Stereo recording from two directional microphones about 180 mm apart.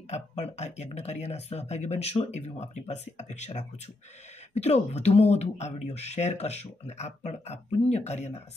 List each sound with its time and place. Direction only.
0.1 s speech: 40° left (ahead or behind)